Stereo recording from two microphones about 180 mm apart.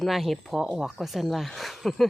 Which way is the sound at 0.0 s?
Centre (ahead or behind).